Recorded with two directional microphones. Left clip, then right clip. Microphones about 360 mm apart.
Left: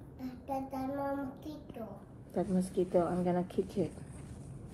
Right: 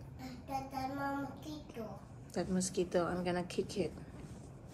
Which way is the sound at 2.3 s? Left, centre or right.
Left.